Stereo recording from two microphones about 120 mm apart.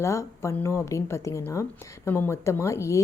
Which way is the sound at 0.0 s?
25° left (ahead or behind).